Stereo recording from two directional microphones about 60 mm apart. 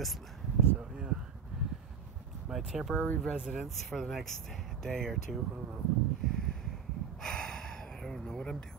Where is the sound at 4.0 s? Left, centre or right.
Centre.